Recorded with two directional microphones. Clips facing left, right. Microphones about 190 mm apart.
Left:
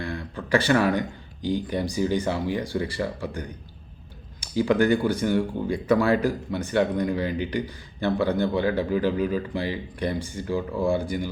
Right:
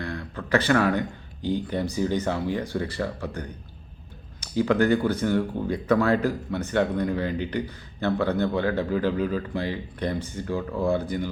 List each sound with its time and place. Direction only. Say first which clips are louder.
0.0 s speech: left 1 dB; 10° left (ahead or behind)